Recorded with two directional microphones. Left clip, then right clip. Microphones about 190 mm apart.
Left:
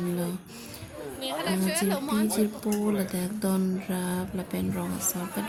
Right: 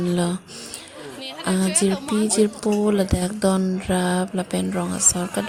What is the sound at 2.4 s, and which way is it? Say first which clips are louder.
Speech: right 9 dB; 35° right (ahead or behind).